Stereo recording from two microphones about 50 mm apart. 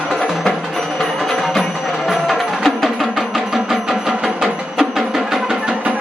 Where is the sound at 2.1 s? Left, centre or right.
Centre.